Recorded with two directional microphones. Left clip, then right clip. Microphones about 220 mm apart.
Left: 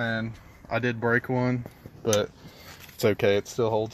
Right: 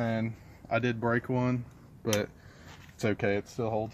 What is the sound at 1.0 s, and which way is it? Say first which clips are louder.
Speech: left 5 dB; 30° left (ahead or behind).